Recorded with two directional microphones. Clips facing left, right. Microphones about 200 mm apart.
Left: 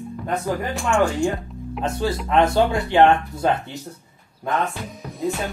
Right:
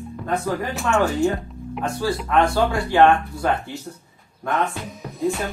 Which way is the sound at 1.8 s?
20° left (ahead or behind).